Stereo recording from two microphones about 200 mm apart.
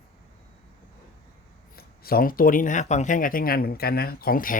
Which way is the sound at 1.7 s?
50° left (ahead or behind).